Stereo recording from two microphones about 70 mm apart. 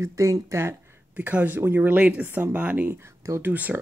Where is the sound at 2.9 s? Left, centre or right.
Right.